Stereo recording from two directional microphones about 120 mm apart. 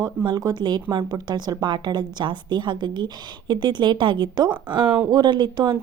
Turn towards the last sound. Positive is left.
turn(degrees=-40)  # may be behind; listen again after turning